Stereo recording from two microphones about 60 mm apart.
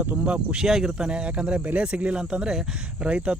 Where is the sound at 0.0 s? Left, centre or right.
Right.